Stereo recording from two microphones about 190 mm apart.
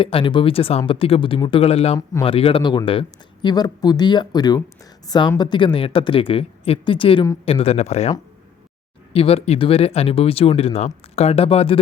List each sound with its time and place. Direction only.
0.0 s speech: 25° left (ahead or behind)
9.1 s speech: 30° left (ahead or behind)